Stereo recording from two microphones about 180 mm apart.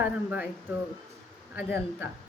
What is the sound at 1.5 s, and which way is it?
Speech, 10° right (ahead or behind).